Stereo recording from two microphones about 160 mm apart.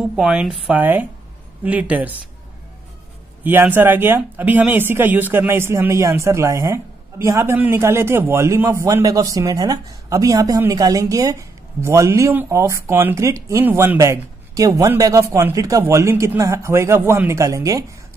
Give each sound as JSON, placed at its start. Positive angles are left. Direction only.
{"t": 0.0, "sound": "speech", "side_deg": -5}
{"t": 3.4, "sound": "speech", "side_deg": -10}